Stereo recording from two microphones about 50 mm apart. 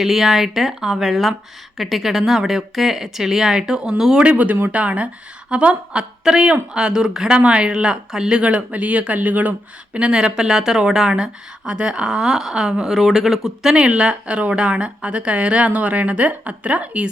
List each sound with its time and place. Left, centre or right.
0.0 s speech: centre
4.2 s speech: right
10.0 s speech: right; by 13.7 s centre
13.7 s speech: centre